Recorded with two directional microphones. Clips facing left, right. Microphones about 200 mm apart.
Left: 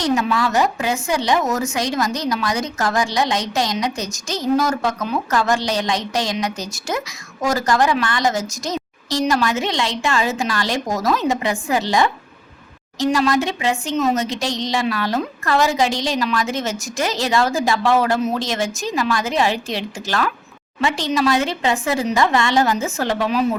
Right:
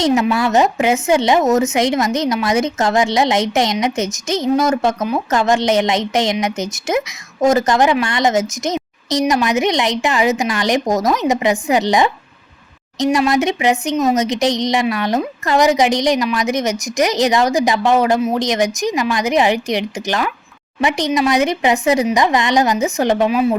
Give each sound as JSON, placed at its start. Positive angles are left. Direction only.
{"t": 0.0, "sound": "speech", "side_deg": -25}